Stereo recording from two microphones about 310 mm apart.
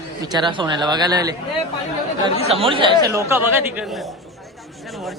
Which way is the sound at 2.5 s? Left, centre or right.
Centre.